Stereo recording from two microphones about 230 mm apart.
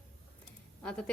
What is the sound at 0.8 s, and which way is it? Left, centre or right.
Speech, centre.